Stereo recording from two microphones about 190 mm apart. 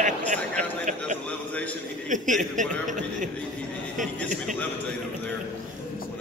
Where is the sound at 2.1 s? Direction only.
40° right (ahead or behind).